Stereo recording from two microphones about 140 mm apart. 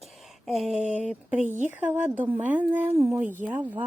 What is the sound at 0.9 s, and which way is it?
Speech, 10° right (ahead or behind).